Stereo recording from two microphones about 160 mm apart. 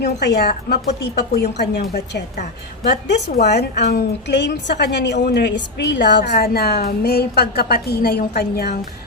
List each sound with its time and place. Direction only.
0.0 s a woman's voice: 90° left
3.2 s a woman's voice: 90° left; by 8.7 s 70° left (ahead or behind)